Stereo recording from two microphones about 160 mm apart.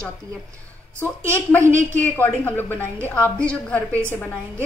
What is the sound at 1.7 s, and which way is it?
Speech, 50° right (ahead or behind).